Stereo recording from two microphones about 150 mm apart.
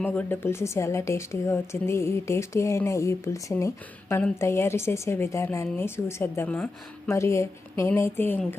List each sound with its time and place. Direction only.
0.0 s a woman's voice: 10° left (ahead or behind)